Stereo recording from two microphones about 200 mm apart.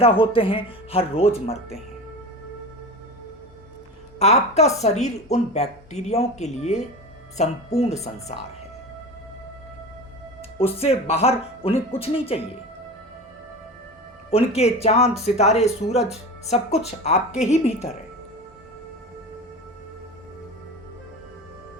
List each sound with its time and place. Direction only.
0.0 s speech: 25° left (ahead or behind)
4.2 s speech: 35° left (ahead or behind)
10.6 s speech: 30° left (ahead or behind)
14.3 s speech: 30° left (ahead or behind)